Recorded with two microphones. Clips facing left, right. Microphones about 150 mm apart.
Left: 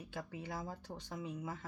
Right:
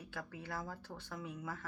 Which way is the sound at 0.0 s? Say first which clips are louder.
Left 2 dB; 15° left (ahead or behind).